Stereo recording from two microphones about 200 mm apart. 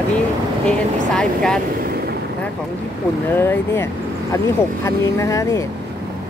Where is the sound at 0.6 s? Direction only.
5° left (ahead or behind).